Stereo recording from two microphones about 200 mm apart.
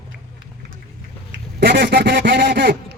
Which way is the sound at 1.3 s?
60° right (ahead or behind).